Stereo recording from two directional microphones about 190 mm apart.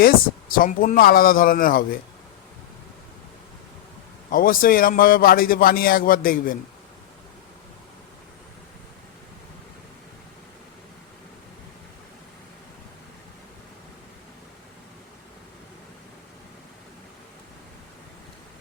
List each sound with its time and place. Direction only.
0.0 s a man's voice: 50° left (ahead or behind)
4.3 s a man's voice: 45° left (ahead or behind)